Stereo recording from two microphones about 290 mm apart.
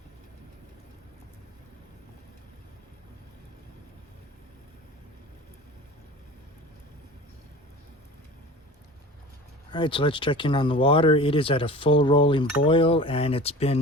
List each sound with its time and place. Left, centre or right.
9.7 s speech: centre